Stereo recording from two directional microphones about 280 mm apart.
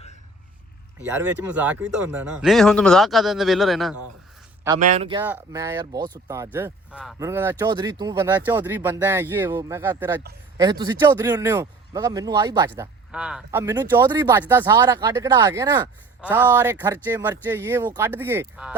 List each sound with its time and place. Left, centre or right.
0.9 s speech: centre
4.8 s speech: right
5.2 s speech: centre